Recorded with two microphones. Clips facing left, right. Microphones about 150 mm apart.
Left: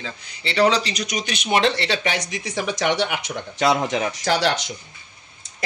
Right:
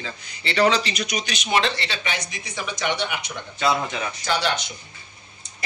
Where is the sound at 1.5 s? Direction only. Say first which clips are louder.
Left 4 dB; 65° left (ahead or behind); by 4.3 s 90° left.